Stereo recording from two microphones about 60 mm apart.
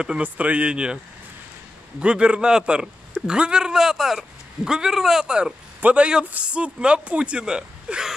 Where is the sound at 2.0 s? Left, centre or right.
Centre.